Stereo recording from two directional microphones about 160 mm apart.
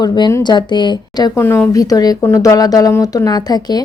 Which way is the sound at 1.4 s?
15° left (ahead or behind).